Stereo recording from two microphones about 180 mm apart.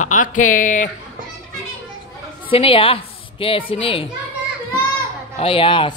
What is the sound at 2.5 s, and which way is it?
A woman's voice, 30° left (ahead or behind).